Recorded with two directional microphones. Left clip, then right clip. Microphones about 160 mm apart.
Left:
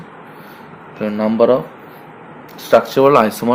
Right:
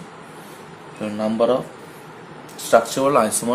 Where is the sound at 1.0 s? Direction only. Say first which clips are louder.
Left 6 dB; 50° left (ahead or behind).